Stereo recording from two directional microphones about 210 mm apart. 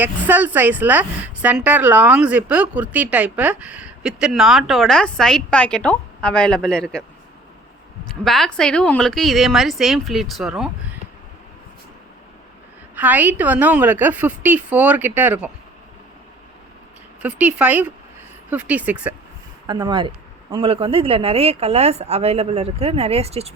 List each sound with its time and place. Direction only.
0.0 s a woman's voice: 10° right (ahead or behind)
8.0 s a woman's voice: centre (ahead or behind)
13.0 s a woman's voice: 10° right (ahead or behind)
17.2 s a woman's voice: 5° right (ahead or behind)
19.6 s speech: 20° right (ahead or behind)